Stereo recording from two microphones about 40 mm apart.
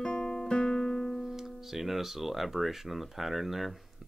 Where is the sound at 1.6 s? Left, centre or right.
Centre.